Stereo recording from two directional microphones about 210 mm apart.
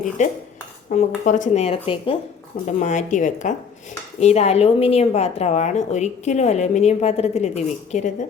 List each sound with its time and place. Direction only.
0.2 s a woman's voice: 35° left (ahead or behind)